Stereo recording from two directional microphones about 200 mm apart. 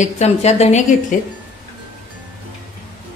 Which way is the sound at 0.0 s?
35° left (ahead or behind).